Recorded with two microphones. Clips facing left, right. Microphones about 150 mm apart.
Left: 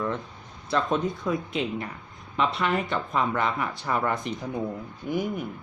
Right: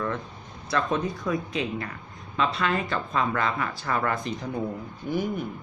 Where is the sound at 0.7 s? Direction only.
20° left (ahead or behind).